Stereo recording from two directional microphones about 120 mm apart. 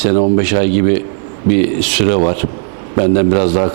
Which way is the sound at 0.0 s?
20° right (ahead or behind).